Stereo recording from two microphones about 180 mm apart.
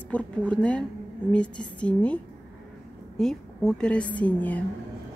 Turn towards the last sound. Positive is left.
turn(degrees=10)  # may be behind; listen again after turning